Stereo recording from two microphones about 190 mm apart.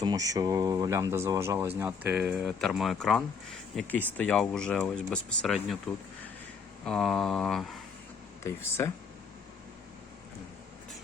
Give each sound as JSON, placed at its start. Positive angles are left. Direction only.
{"t": 0.0, "sound": "speech", "side_deg": -20}